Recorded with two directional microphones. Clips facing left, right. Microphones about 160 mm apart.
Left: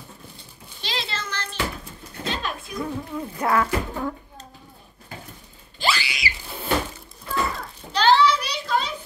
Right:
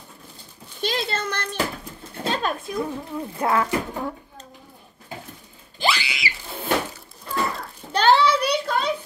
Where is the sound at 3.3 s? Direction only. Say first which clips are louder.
Even; 20° right (ahead or behind).